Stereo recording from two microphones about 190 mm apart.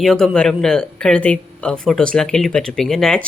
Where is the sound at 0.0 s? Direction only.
Centre (ahead or behind).